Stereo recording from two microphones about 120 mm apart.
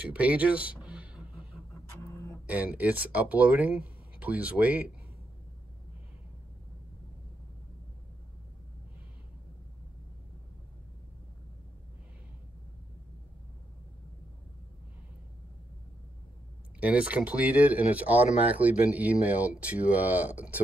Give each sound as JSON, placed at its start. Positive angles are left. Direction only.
{"t": 0.0, "sound": "a sound", "side_deg": -10}
{"t": 2.4, "sound": "speech", "side_deg": -10}
{"t": 16.8, "sound": "speech", "side_deg": -10}